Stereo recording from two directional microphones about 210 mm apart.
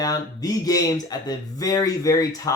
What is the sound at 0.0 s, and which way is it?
Speech, 15° left (ahead or behind).